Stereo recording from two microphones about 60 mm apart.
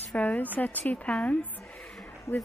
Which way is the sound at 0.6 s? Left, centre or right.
Left.